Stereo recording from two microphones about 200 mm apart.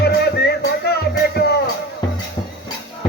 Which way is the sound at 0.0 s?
55° left (ahead or behind).